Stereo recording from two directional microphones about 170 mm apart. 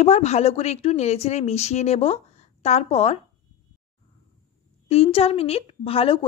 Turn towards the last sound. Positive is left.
turn(degrees=30)  # may be behind; listen again after turning